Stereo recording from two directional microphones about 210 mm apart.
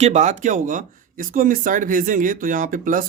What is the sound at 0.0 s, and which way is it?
Speech, 35° right (ahead or behind).